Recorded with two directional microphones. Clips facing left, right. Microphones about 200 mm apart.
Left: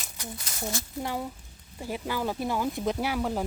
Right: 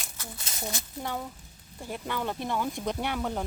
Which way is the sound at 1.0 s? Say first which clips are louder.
Left 1 dB; 10° left (ahead or behind).